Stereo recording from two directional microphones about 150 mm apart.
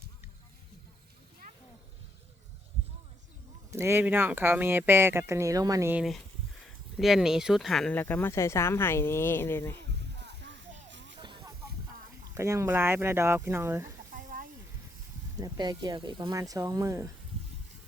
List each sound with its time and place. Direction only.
3.7 s speech: 15° right (ahead or behind)
5.9 s speech: centre (ahead or behind); by 9.8 s 15° left (ahead or behind)
11.2 s a sound: 30° right (ahead or behind)
12.3 s speech: 20° right (ahead or behind)
14.1 s a sound: 65° right (ahead or behind)
15.4 s speech: 30° right (ahead or behind)